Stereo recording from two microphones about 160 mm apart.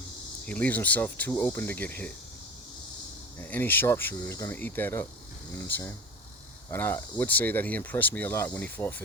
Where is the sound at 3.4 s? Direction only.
10° left (ahead or behind).